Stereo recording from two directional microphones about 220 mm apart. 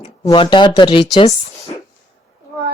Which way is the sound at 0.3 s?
20° left (ahead or behind).